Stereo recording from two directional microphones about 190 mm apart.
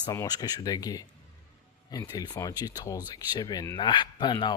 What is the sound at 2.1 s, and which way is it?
Speech, 20° left (ahead or behind).